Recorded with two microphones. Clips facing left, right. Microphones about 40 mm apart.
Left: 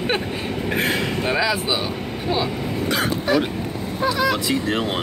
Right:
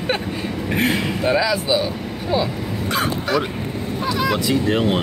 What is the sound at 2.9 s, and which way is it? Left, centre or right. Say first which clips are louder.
Vehicle: even; centre.